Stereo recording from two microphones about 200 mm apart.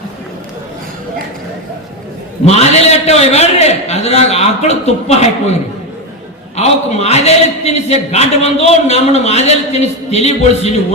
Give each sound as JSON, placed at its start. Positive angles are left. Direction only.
{"t": 2.4, "sound": "a man's voice", "side_deg": 30}
{"t": 6.6, "sound": "a man's voice", "side_deg": 30}